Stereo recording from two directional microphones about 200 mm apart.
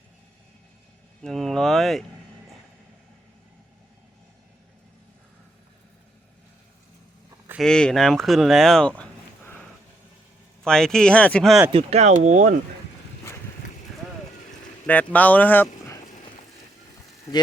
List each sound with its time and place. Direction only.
1.2 s speech: centre (ahead or behind)
7.6 s speech: 5° left (ahead or behind)
9.0 s a sound: 10° left (ahead or behind)
10.6 s speech: 5° left (ahead or behind)
11.7 s speech: 30° right (ahead or behind)
15.1 s speech: 10° left (ahead or behind)